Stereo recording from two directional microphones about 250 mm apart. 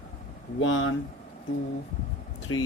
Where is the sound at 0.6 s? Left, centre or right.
Left.